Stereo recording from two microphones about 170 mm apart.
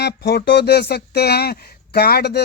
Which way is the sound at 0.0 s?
85° left.